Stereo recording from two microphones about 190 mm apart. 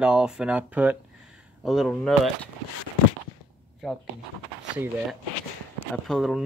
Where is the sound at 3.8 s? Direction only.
Centre (ahead or behind).